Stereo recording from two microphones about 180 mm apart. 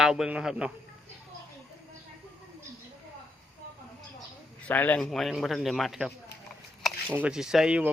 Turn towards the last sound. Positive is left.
turn(degrees=-5)  # may be behind; listen again after turning